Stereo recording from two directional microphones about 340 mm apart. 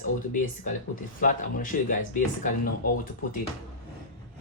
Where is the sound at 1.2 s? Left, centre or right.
Left.